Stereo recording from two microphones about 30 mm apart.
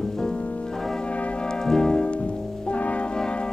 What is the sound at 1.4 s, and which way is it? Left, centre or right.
Brass instrument, left.